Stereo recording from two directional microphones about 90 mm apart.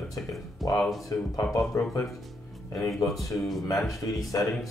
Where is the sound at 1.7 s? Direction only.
40° left (ahead or behind).